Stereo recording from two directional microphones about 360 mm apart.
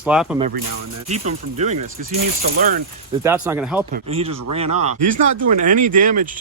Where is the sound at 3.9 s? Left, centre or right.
Centre.